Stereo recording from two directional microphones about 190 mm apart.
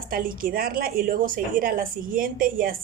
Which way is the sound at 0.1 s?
50° right (ahead or behind).